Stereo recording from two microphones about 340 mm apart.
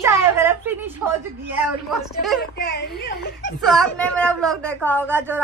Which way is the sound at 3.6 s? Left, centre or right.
Centre.